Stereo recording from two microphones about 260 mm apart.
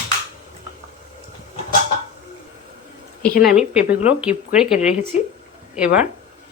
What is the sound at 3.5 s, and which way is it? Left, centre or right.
Speech, centre.